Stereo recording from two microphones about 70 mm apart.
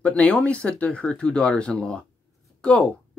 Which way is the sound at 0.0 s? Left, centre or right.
Centre.